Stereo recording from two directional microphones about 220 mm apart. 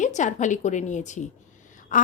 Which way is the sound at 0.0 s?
35° left (ahead or behind).